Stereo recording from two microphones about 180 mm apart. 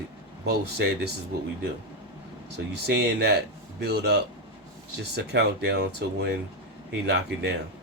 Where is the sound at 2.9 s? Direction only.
65° right (ahead or behind).